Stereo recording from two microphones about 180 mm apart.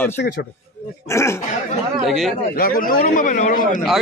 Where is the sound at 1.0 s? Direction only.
15° left (ahead or behind).